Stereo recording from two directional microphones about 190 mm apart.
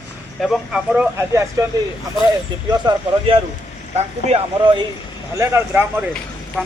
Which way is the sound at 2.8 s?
30° right (ahead or behind).